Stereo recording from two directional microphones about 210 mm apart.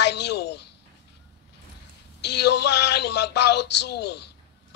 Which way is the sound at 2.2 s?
55° left (ahead or behind).